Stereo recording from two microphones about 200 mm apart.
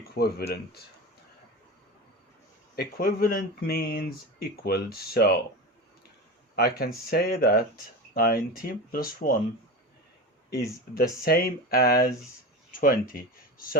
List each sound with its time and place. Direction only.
0.1 s speech: 55° left (ahead or behind)
2.7 s speech: 50° left (ahead or behind)
6.6 s speech: 50° left (ahead or behind)
11.2 s speech: 50° left (ahead or behind)